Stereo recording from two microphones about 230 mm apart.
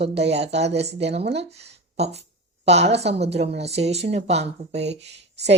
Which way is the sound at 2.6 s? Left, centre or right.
Right.